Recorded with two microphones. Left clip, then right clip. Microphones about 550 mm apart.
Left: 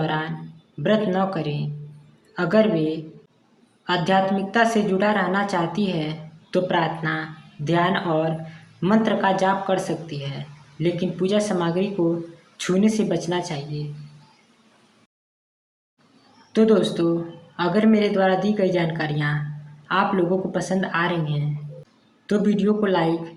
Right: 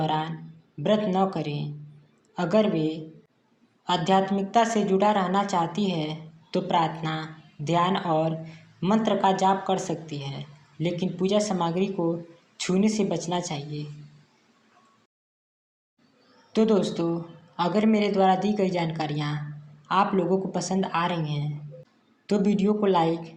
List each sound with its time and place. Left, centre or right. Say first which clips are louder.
0.0 s a sound: left 1 dB; left
0.8 s a woman's voice: left 2 dB; left
16.5 s a woman's voice: left 5 dB; left